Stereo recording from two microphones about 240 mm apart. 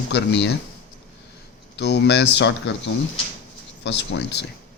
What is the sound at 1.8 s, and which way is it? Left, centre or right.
Speech, left.